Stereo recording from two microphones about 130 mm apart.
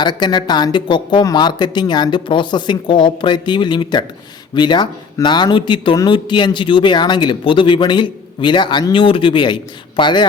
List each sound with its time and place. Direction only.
0.0 s speech: 35° left (ahead or behind)